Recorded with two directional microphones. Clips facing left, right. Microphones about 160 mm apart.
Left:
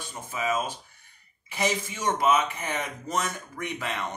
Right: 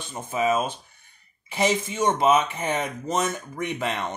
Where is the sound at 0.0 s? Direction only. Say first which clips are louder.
Right 6 dB; 25° right (ahead or behind).